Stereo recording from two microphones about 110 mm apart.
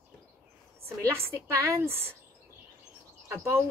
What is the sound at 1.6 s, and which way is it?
Speech, 20° right (ahead or behind).